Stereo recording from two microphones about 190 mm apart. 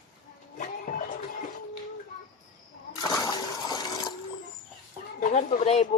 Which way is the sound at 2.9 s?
20° left (ahead or behind).